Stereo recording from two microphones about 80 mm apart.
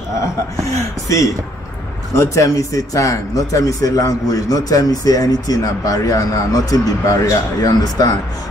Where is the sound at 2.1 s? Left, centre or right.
Left.